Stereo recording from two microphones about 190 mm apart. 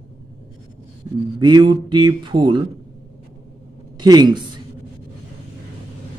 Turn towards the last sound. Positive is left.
turn(degrees=-25)  # may be behind; listen again after turning